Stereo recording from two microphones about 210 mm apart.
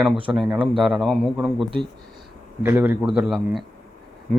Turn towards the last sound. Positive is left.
turn(degrees=-5)  # may be behind; listen again after turning